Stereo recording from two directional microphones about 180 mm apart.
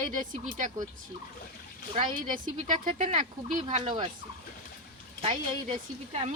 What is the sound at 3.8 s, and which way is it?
Speech, 25° right (ahead or behind).